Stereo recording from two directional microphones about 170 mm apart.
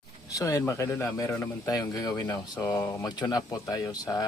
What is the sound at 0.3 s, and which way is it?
Speech, 20° left (ahead or behind).